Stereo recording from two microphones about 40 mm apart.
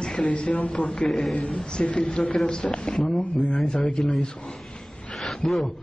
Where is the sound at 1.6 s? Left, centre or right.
Left.